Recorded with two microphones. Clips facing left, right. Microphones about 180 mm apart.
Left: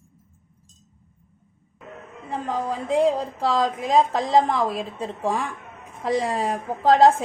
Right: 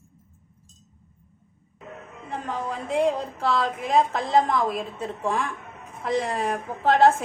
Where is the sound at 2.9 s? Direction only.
35° left (ahead or behind).